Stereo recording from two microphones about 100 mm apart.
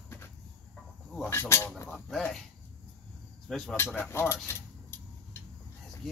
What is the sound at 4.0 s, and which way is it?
Speech, 25° left (ahead or behind).